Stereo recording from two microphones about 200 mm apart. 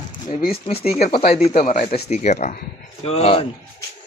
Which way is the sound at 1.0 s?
30° left (ahead or behind).